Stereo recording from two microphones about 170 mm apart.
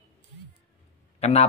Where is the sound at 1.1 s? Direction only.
40° left (ahead or behind).